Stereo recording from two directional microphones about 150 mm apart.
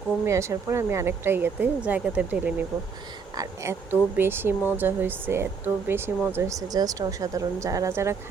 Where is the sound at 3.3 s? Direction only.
20° right (ahead or behind).